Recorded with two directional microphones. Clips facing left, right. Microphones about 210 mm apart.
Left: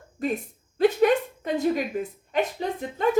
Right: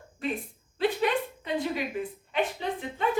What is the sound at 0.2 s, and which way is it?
Speech, 40° left (ahead or behind).